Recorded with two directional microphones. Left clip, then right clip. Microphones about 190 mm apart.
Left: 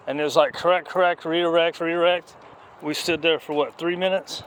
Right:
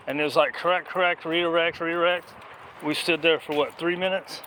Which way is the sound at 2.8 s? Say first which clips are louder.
Even; 20° left (ahead or behind).